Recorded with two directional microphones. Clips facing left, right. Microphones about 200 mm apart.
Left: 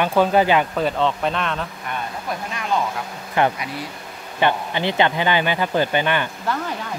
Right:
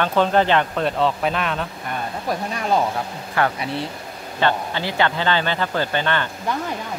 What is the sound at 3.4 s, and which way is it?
Speech, 20° left (ahead or behind).